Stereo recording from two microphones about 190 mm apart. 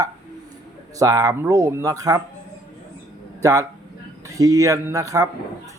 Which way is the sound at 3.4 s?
15° right (ahead or behind).